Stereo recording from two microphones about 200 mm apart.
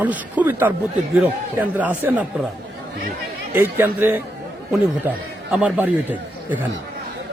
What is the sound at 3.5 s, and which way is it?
A man's voice, 10° right (ahead or behind).